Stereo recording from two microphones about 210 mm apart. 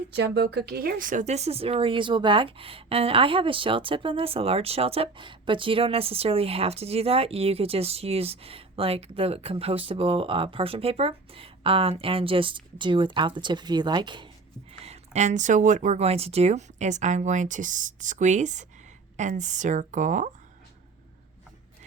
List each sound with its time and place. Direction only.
0.1 s speech: 55° right (ahead or behind); by 20.3 s 35° right (ahead or behind)